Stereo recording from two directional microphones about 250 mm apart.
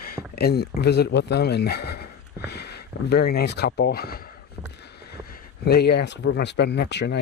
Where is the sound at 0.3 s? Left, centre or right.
Left.